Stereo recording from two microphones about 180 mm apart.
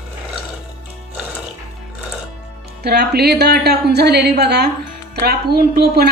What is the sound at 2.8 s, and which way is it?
A woman's voice, 65° right (ahead or behind).